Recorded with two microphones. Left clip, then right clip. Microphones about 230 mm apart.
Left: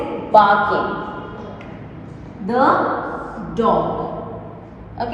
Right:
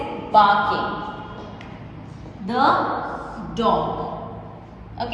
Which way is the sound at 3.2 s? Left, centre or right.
Centre.